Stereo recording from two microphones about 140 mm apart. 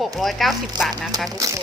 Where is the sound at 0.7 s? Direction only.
30° right (ahead or behind).